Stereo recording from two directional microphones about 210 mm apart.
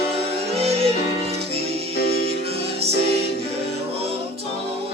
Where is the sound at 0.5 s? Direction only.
30° right (ahead or behind).